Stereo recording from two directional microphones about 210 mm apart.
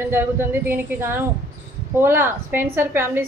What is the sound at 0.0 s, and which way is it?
A woman's voice, 10° right (ahead or behind).